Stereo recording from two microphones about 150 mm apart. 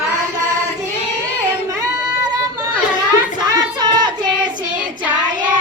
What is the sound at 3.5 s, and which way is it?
Child singing, 25° right (ahead or behind).